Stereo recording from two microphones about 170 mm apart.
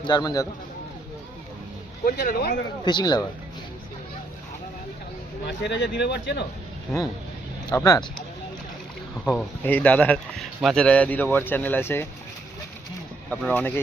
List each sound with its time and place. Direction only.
0.0 s speech: 25° left (ahead or behind)
2.0 s speech: 60° left (ahead or behind)
2.8 s speech: 25° left (ahead or behind)
5.5 s speech: 85° left
7.7 s speech: 20° left (ahead or behind)
9.2 s speech: 10° left (ahead or behind)
13.3 s speech: 10° left (ahead or behind)